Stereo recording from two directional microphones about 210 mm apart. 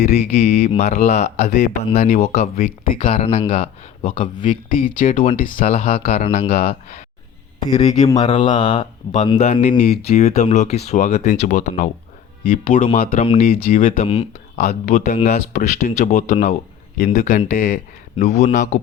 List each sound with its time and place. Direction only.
0.0 s speech: 30° left (ahead or behind)
3.0 s speech: 25° left (ahead or behind)
4.7 s speech: 40° left (ahead or behind)
13.8 s speech: 30° left (ahead or behind)